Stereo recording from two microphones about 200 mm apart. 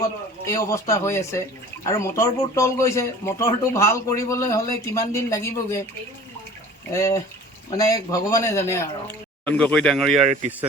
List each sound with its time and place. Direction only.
0.4 s a man's voice: 15° left (ahead or behind)
6.9 s a man's voice: 15° left (ahead or behind)